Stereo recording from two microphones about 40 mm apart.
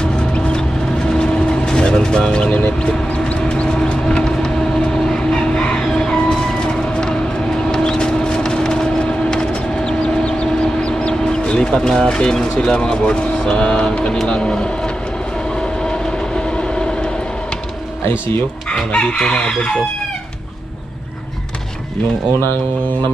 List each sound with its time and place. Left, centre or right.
0.0 s vehicle: left
3.6 s vehicle: left
4.9 s train: centre
5.8 s music: centre
6.3 s vehicle: centre
12.5 s speech: left
15.5 s train: centre
18.7 s chicken: left
19.1 s speech: left